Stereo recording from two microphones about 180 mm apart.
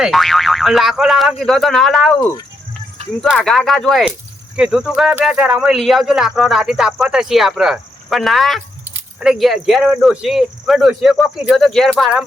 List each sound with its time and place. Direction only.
0.0 s speech: centre (ahead or behind)
3.2 s speech: centre (ahead or behind)